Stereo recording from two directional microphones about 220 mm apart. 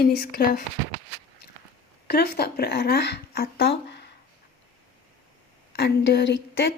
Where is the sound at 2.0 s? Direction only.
45° left (ahead or behind).